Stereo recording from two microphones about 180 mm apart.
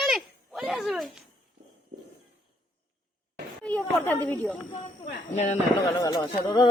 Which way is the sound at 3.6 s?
10° left (ahead or behind).